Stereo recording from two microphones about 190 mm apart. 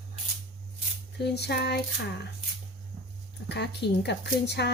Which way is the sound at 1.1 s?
60° left (ahead or behind).